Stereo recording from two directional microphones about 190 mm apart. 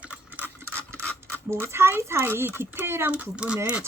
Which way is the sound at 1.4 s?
15° right (ahead or behind).